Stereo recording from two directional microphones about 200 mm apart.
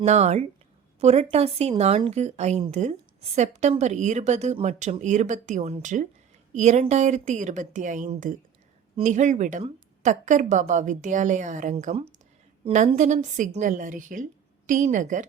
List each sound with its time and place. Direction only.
0.0 s a woman's voice: 35° right (ahead or behind)